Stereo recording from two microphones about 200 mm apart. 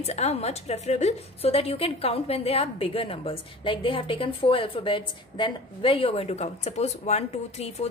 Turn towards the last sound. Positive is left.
turn(degrees=35)  # may be behind; listen again after turning